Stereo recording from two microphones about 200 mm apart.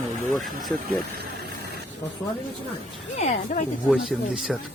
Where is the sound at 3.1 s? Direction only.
35° left (ahead or behind).